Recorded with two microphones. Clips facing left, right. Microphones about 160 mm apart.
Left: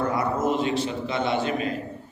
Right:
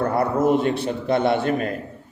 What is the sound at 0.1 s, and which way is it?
A man's voice, 60° right (ahead or behind).